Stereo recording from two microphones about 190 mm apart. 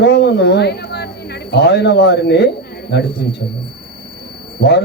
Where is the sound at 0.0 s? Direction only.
65° left (ahead or behind).